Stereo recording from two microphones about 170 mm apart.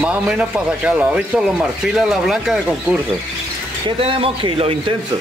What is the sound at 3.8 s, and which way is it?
A man's voice, 30° right (ahead or behind).